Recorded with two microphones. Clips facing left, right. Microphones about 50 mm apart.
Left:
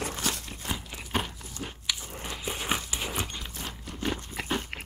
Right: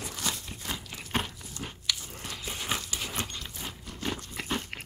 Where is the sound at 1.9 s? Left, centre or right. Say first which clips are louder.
Even; centre.